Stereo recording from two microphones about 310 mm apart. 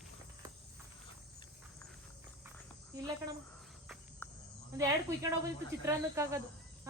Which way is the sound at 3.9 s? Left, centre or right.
Centre.